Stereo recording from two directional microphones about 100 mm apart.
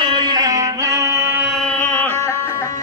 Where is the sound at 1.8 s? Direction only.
15° left (ahead or behind).